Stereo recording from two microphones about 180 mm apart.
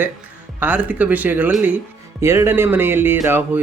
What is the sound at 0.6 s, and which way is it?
Speech, 10° right (ahead or behind).